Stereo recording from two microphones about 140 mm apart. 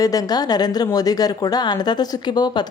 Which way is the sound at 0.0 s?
25° left (ahead or behind).